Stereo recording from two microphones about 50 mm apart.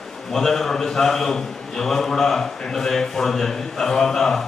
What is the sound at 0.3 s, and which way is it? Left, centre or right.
A man's voice, centre.